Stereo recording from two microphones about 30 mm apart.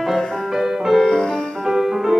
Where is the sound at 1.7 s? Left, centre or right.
Centre.